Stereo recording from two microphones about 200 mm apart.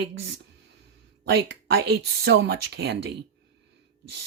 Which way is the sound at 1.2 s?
55° right (ahead or behind).